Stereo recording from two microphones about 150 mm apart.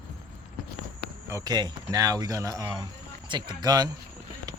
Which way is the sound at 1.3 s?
20° right (ahead or behind).